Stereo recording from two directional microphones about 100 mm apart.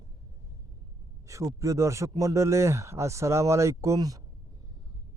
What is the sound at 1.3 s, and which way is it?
A man's voice, 30° right (ahead or behind).